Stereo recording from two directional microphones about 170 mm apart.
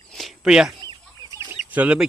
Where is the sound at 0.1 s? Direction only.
Centre (ahead or behind).